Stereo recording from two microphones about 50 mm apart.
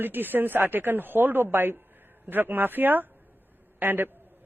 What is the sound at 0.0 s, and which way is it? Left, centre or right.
Speech, right.